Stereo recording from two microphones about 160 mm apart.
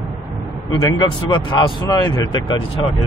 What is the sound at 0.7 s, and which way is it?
Speech, 30° left (ahead or behind).